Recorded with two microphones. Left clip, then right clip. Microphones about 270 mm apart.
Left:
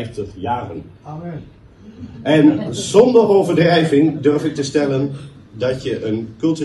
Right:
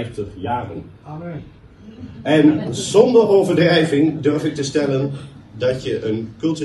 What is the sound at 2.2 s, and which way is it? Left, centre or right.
A man's voice, left.